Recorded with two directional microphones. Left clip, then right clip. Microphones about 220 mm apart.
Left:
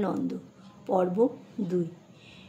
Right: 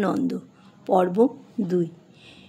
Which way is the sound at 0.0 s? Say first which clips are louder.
Right 6 dB; 40° right (ahead or behind).